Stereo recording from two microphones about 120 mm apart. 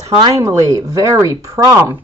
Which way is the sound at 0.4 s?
25° right (ahead or behind).